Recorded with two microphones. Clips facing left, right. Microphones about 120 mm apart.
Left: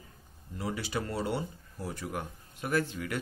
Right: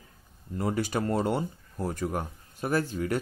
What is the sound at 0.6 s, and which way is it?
Speech, 50° right (ahead or behind).